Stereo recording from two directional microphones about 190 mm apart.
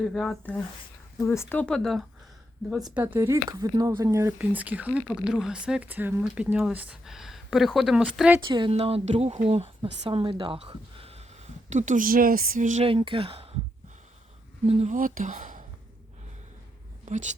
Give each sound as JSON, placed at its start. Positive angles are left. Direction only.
{"t": 0.0, "sound": "speech", "side_deg": 0}
{"t": 2.9, "sound": "speech", "side_deg": -10}
{"t": 8.4, "sound": "speech", "side_deg": -25}
{"t": 11.7, "sound": "speech", "side_deg": -40}
{"t": 14.7, "sound": "speech", "side_deg": -35}
{"t": 17.1, "sound": "speech", "side_deg": -40}